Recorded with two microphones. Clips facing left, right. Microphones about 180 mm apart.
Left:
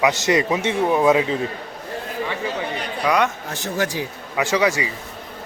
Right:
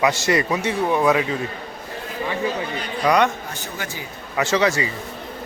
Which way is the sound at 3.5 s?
85° left.